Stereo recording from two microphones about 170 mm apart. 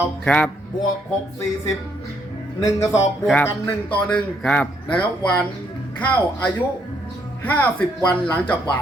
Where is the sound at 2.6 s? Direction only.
15° left (ahead or behind).